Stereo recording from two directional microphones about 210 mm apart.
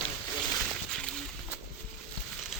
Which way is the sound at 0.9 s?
5° left (ahead or behind).